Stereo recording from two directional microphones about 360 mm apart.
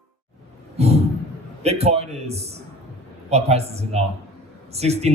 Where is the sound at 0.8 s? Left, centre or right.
Centre.